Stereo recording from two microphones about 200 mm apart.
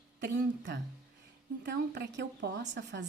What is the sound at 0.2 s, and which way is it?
A woman's voice, 60° right (ahead or behind).